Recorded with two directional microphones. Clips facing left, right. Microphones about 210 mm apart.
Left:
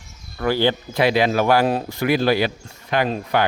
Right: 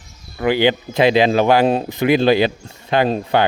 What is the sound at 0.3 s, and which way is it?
Speech, 15° right (ahead or behind).